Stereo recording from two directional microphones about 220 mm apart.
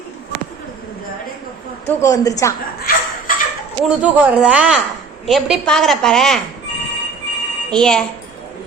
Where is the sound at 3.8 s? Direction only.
5° right (ahead or behind).